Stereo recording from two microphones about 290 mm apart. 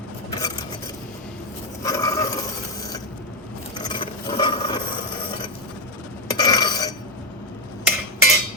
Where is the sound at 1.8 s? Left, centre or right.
Centre.